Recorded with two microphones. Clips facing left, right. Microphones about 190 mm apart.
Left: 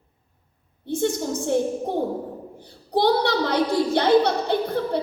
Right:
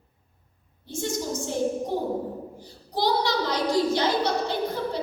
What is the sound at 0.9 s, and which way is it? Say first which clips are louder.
A woman's voice: left 6 dB; 60° left (ahead or behind).